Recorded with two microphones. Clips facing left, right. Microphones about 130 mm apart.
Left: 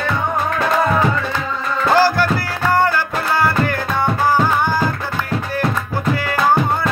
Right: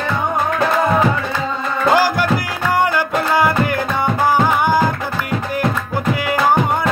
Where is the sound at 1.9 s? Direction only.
15° right (ahead or behind).